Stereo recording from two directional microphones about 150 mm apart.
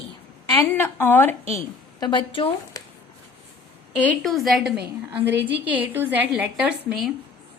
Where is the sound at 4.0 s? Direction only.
5° left (ahead or behind).